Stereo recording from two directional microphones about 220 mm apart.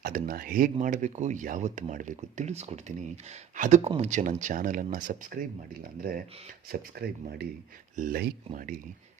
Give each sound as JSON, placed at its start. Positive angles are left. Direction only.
{"t": 0.0, "sound": "speech", "side_deg": -40}